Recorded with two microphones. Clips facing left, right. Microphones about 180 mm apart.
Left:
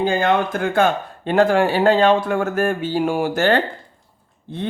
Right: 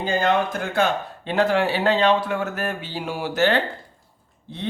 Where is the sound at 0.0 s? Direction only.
55° left (ahead or behind).